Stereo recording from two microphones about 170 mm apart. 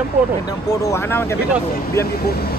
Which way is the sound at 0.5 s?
20° left (ahead or behind).